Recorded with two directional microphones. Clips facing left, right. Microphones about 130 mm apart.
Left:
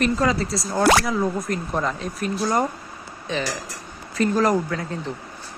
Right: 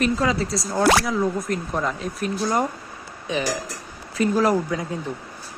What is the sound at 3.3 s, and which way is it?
Speech, 10° right (ahead or behind).